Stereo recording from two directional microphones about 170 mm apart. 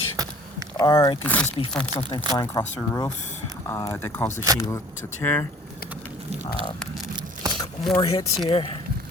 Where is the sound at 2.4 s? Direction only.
20° left (ahead or behind).